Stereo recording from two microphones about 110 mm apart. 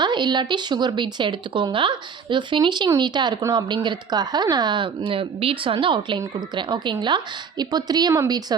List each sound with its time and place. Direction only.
0.0 s speech: 45° right (ahead or behind)